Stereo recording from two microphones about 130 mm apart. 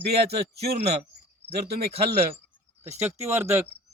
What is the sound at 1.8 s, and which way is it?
Speech, 50° right (ahead or behind).